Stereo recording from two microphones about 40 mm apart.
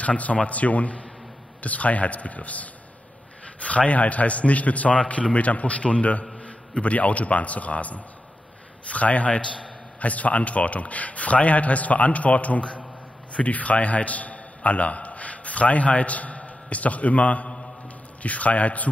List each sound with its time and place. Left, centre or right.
0.0 s a man's voice: left